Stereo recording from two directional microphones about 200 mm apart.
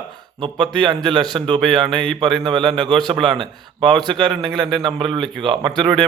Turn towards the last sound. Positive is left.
turn(degrees=-20)  # may be behind; listen again after turning